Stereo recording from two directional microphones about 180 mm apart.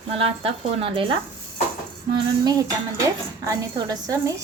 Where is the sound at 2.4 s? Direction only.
20° right (ahead or behind).